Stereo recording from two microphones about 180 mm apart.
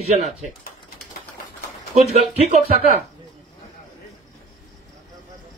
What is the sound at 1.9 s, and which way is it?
Speech, 40° right (ahead or behind).